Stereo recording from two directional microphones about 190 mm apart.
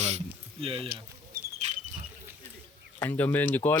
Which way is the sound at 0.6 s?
30° right (ahead or behind).